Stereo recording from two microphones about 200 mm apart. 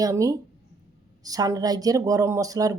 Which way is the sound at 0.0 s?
15° right (ahead or behind).